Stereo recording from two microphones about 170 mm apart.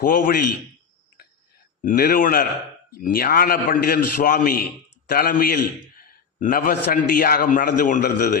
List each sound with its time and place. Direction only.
0.0 s a man's voice: 55° left (ahead or behind)
1.8 s a man's voice: 55° left (ahead or behind)